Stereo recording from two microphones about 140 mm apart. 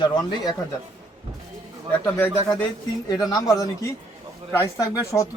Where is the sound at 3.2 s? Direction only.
25° left (ahead or behind).